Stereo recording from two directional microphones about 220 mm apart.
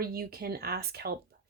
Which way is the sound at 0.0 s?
45° right (ahead or behind).